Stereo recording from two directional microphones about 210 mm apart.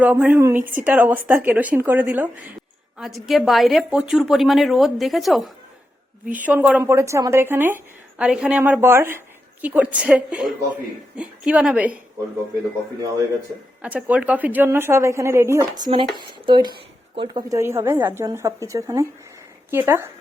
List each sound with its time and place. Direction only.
0.0 s a woman's voice: 5° right (ahead or behind)
11.4 s a woman's voice: 5° right (ahead or behind)
13.8 s speech: 5° right (ahead or behind)